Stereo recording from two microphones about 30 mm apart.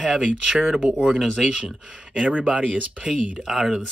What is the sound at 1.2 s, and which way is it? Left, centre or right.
Speech, centre.